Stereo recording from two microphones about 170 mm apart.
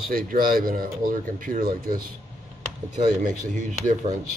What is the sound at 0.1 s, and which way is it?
Speech, 55° right (ahead or behind).